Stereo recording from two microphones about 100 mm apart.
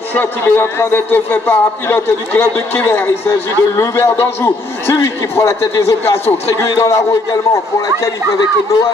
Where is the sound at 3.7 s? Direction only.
30° left (ahead or behind).